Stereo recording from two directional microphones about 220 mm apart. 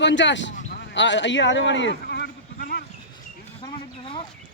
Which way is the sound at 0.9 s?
55° left (ahead or behind).